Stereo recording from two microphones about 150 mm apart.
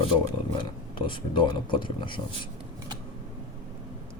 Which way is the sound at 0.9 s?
35° left (ahead or behind).